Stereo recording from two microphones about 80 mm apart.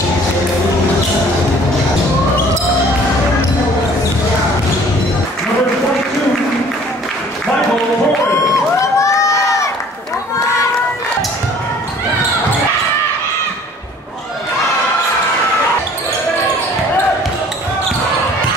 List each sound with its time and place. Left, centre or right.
8.9 s crowd: left